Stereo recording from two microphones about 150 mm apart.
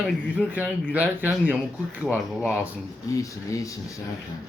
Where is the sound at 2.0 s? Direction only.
15° left (ahead or behind).